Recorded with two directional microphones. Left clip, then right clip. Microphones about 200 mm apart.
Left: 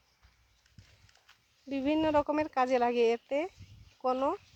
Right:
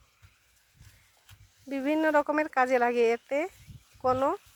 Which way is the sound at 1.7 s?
Centre (ahead or behind).